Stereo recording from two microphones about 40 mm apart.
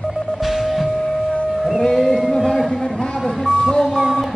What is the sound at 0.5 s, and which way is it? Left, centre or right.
Music, centre.